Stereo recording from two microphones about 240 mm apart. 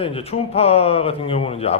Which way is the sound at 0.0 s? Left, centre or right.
Left.